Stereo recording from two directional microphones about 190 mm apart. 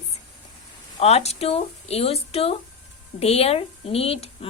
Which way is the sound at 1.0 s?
35° left (ahead or behind).